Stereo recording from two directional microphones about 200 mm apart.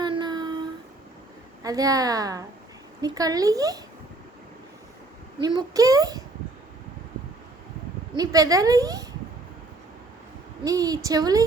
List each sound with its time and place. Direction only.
0.0 s child singing: 20° right (ahead or behind)
1.6 s a woman's voice: 15° right (ahead or behind)
5.4 s a child's voice: 20° right (ahead or behind)
8.1 s a woman's voice: 20° right (ahead or behind)
10.6 s a woman's voice: 15° right (ahead or behind)